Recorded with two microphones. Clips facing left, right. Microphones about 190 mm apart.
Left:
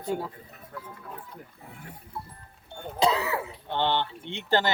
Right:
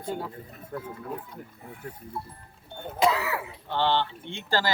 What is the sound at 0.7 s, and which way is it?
Speech, 50° right (ahead or behind).